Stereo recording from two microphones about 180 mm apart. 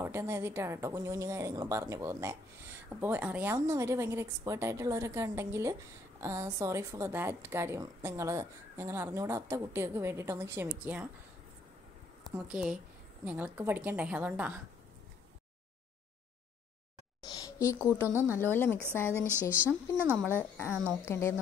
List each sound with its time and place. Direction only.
0.0 s a woman's voice: 15° right (ahead or behind)
12.4 s a woman's voice: 5° right (ahead or behind)
17.4 s speech: 20° left (ahead or behind)
18.0 s a woman's voice: 10° right (ahead or behind)
18.4 s a woman's voice: 10° left (ahead or behind)
19.1 s a woman's voice: 15° right (ahead or behind)
21.0 s a woman's voice: 15° left (ahead or behind)